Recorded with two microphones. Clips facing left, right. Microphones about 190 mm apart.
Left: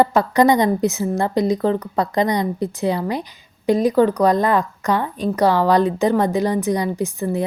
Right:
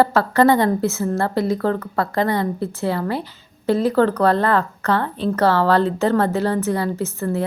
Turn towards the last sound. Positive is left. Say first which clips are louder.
# left 1 dB
turn(degrees=15)  # may be behind; listen again after turning